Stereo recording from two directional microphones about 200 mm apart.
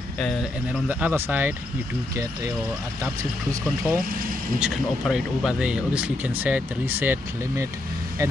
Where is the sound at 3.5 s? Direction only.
15° right (ahead or behind).